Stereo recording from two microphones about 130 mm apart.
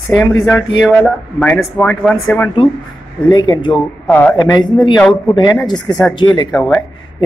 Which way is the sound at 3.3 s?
35° left (ahead or behind).